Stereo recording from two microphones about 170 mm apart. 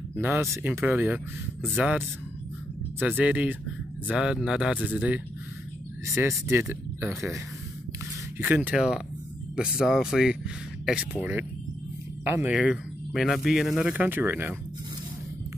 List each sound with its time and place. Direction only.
0.1 s speech: 15° right (ahead or behind)
3.0 s speech: 10° right (ahead or behind)
8.4 s speech: 10° right (ahead or behind)